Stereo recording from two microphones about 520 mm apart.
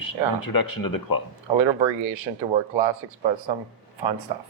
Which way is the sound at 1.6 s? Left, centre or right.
Right.